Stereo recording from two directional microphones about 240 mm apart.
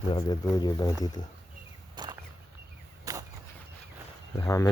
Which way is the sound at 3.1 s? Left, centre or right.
Centre.